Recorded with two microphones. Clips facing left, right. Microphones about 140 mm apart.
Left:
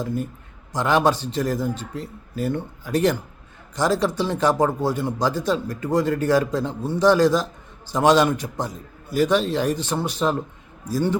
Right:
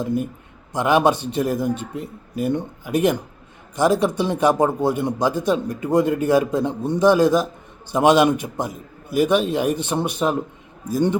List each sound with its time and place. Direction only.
0.7 s speech: 15° right (ahead or behind)